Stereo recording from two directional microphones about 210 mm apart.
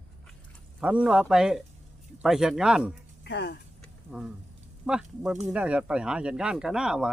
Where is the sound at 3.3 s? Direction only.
55° left (ahead or behind).